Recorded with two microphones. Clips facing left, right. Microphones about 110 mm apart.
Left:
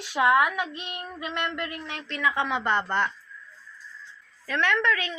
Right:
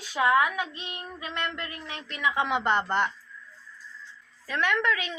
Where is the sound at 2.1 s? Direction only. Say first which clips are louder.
Even; 15° right (ahead or behind).